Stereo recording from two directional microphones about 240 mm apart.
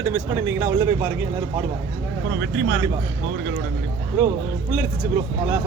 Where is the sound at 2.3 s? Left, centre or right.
Right.